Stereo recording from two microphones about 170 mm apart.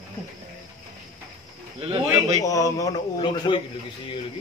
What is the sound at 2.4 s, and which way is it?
A man's voice, 20° left (ahead or behind).